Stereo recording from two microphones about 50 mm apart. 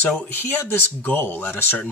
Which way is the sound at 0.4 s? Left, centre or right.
Left.